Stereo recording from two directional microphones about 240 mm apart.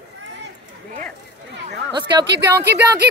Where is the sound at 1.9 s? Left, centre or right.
Centre.